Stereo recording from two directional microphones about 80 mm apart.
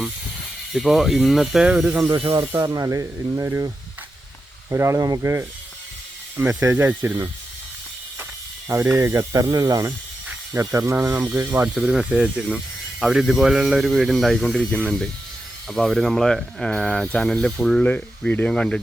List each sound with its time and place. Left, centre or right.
0.7 s speech: centre
2.4 s speech: right
4.7 s speech: right
4.9 s speech: right
5.2 s speech: right
8.8 s speech: right
11.8 s speech: centre